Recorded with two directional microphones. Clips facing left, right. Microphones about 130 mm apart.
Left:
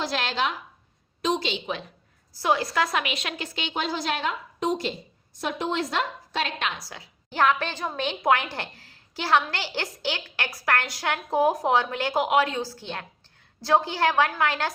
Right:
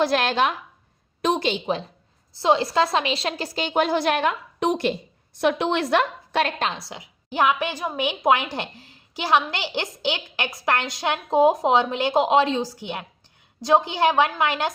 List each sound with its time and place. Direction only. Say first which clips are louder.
0.0 s a woman's voice: right 7 dB; 55° right (ahead or behind); by 1.8 s 40° right (ahead or behind)
2.3 s a woman's voice: right 4 dB; 25° right (ahead or behind); by 6.5 s 65° right (ahead or behind)
6.6 s a woman's voice: right 4 dB; 30° right (ahead or behind)